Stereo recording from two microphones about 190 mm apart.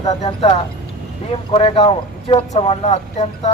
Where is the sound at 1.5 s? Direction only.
30° left (ahead or behind).